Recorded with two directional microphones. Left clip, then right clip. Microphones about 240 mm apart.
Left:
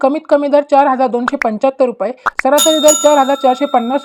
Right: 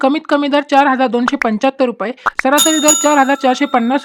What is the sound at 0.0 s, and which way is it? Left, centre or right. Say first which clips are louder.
Speech: left 2 dB; centre.